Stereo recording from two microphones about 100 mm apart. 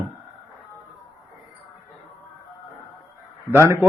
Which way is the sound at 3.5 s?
25° right (ahead or behind).